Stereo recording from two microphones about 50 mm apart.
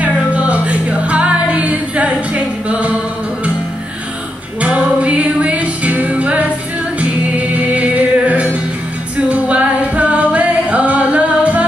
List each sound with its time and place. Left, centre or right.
0.0 s music: right
4.6 s music: right
9.1 s singing: right